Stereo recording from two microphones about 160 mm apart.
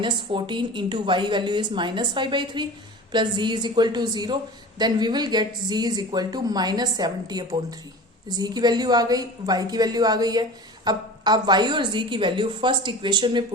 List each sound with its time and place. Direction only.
0.0 s speech: 30° right (ahead or behind)